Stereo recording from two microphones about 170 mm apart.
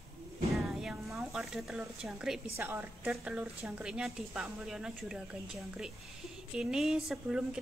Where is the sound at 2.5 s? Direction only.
15° right (ahead or behind).